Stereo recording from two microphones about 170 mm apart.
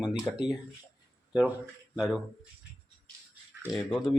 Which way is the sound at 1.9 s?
5° right (ahead or behind).